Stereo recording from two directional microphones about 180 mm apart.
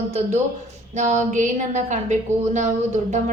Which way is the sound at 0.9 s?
40° right (ahead or behind).